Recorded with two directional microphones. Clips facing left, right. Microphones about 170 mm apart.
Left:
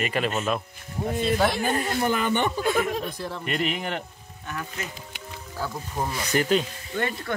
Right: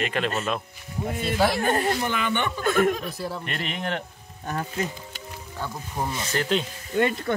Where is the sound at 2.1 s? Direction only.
40° left (ahead or behind).